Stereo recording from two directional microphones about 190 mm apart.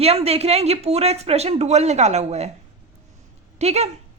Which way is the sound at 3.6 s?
35° right (ahead or behind).